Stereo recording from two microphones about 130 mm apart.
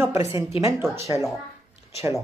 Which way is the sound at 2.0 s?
20° right (ahead or behind).